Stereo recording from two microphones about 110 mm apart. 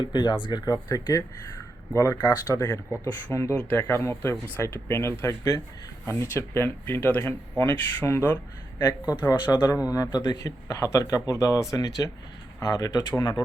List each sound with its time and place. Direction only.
0.0 s speech: 45° left (ahead or behind)
3.0 s speech: 15° left (ahead or behind)
9.5 s speech: 40° left (ahead or behind)